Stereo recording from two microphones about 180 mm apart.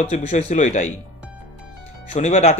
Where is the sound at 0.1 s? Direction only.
40° left (ahead or behind).